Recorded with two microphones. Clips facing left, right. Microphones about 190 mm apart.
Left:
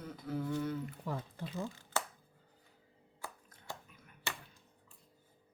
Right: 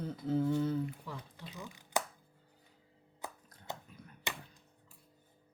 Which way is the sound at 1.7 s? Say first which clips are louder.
Right 3 dB; 15° right (ahead or behind).